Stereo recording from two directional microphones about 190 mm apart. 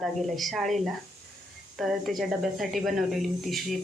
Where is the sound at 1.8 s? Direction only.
Centre (ahead or behind).